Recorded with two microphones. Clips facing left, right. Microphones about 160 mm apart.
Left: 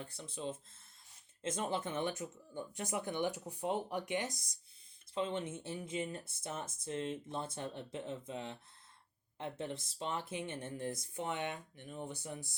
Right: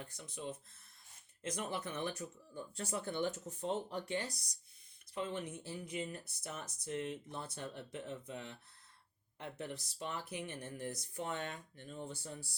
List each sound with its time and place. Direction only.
0.0 s speech: 30° left (ahead or behind)